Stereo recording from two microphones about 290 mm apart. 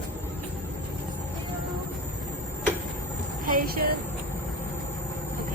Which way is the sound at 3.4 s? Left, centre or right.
Right.